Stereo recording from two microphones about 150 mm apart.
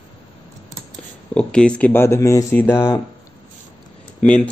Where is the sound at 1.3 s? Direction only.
5° left (ahead or behind).